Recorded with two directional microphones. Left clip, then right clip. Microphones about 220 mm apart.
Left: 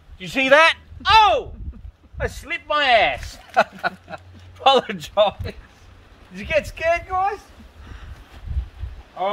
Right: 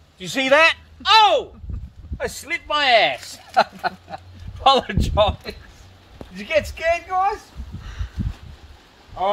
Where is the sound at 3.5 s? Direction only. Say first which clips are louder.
Even; 25° left (ahead or behind).